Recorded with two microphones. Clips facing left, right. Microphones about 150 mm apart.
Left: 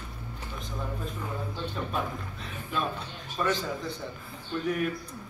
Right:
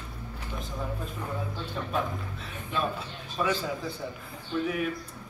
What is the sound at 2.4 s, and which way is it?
A man's voice, centre (ahead or behind).